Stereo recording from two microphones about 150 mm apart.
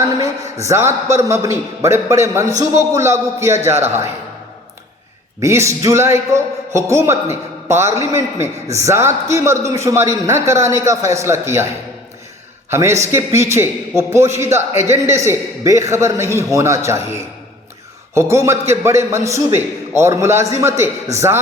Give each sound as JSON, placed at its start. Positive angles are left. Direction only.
{"t": 0.2, "sound": "a man's voice", "side_deg": -20}
{"t": 5.4, "sound": "a man's voice", "side_deg": -20}
{"t": 12.7, "sound": "a man's voice", "side_deg": -20}